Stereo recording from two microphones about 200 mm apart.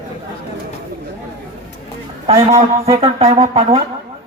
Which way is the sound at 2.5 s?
30° right (ahead or behind).